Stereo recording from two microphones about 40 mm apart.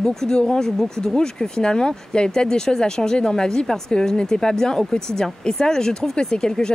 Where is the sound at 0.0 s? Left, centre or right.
Centre.